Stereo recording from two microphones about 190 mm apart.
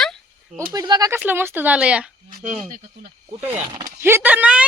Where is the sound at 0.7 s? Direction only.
20° right (ahead or behind).